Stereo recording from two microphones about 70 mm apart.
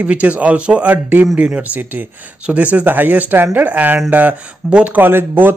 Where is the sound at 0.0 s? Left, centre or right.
Right.